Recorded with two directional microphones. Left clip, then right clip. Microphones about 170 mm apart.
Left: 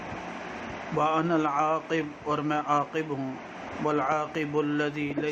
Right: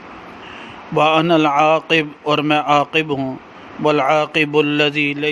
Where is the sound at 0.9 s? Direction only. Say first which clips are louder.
Right 12 dB; 60° right (ahead or behind).